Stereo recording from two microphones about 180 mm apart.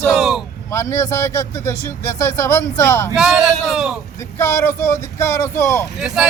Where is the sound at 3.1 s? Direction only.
Centre (ahead or behind).